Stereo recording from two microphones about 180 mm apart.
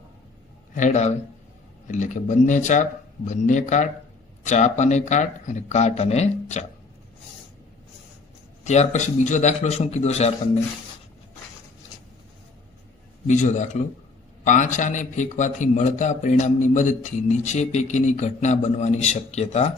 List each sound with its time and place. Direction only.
0.7 s a man's voice: 40° left (ahead or behind)
8.6 s a man's voice: 40° left (ahead or behind)
13.2 s a man's voice: 45° left (ahead or behind)